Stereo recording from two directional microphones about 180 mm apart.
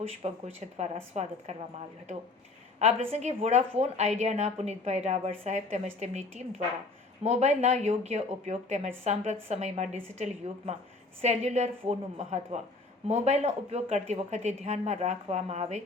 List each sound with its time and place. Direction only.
0.2 s a woman's voice: 35° right (ahead or behind)
2.7 s a woman's voice: 35° right (ahead or behind)
11.2 s a woman's voice: 40° right (ahead or behind)